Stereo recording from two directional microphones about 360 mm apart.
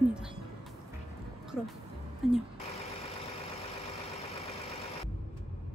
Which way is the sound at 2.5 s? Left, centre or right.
Centre.